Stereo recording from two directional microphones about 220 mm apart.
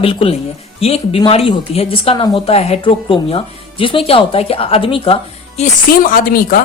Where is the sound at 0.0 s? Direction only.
25° left (ahead or behind).